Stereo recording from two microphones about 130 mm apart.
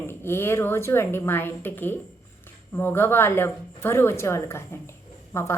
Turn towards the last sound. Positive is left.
turn(degrees=20)  # may be behind; listen again after turning